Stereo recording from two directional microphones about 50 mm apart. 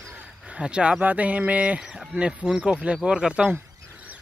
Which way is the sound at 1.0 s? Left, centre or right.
Right.